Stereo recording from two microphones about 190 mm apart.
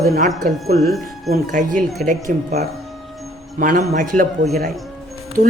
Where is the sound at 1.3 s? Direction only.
45° right (ahead or behind).